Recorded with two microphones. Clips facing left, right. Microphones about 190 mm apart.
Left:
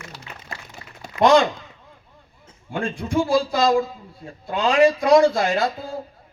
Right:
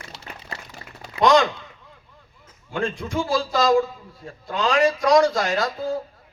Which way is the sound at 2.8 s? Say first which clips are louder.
Left 3 dB; 55° left (ahead or behind).